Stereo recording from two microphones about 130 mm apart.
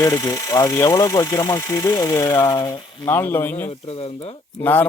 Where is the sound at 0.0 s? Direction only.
30° left (ahead or behind).